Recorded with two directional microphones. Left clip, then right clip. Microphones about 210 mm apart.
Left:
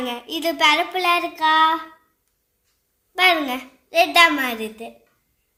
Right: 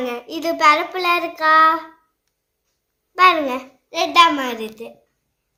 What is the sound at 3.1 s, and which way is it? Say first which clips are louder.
A child's voice: right 3 dB; 25° left (ahead or behind).